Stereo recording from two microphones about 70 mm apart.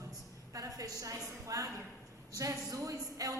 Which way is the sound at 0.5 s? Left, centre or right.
Right.